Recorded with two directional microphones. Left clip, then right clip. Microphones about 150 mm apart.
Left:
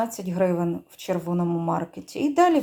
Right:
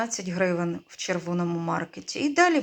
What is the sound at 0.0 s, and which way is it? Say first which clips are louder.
Speech: left 2 dB; 10° left (ahead or behind).